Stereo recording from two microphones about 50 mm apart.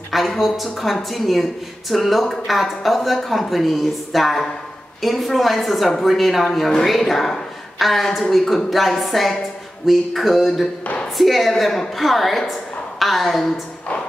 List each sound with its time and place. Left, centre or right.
0.1 s a woman's voice: centre